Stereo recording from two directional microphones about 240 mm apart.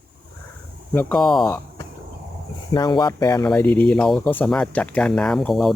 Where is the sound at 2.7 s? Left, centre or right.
Centre.